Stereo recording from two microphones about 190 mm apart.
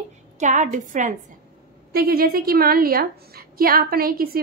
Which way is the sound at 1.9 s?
55° right (ahead or behind).